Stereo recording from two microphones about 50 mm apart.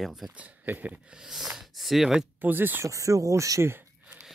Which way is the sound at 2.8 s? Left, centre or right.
Right.